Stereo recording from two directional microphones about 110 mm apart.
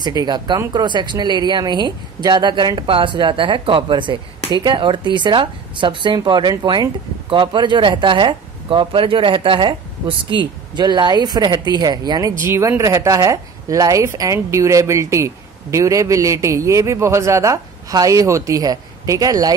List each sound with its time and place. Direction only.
0.0 s speech: 40° right (ahead or behind)
12.4 s speech: 25° right (ahead or behind)